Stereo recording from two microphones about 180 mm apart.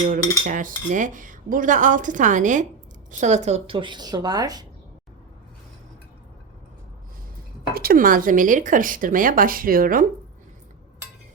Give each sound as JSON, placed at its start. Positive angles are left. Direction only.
{"t": 0.1, "sound": "cutlery", "side_deg": -45}
{"t": 3.1, "sound": "speech", "side_deg": -40}
{"t": 7.7, "sound": "cutlery", "side_deg": -55}